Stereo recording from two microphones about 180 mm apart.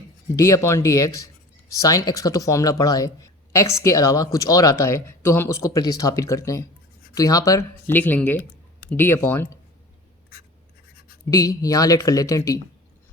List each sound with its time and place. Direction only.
0.3 s speech: 15° left (ahead or behind)
11.3 s speech: 20° left (ahead or behind)